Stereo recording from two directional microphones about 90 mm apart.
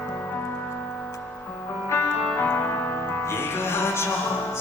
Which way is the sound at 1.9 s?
25° left (ahead or behind).